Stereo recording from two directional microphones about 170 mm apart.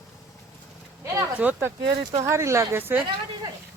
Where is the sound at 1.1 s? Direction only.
10° right (ahead or behind).